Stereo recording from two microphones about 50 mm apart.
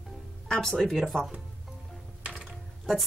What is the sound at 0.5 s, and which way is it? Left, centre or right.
Speech, centre.